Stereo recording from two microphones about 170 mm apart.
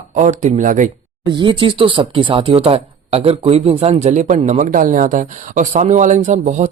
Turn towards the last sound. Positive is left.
turn(degrees=-45)  # may be behind; listen again after turning